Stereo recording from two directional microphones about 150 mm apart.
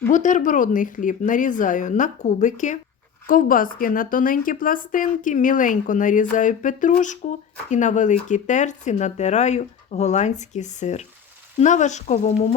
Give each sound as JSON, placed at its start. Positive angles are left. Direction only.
{"t": 0.1, "sound": "speech", "side_deg": 55}